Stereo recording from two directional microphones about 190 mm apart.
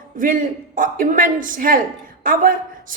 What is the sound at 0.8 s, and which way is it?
A woman's voice, 45° right (ahead or behind).